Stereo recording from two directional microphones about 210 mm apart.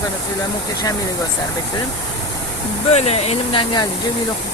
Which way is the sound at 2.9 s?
30° left (ahead or behind).